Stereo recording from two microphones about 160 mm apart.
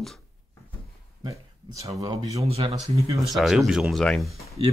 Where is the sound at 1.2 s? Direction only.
20° right (ahead or behind).